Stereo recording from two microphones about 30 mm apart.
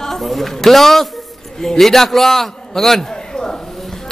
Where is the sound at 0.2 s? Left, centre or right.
Centre.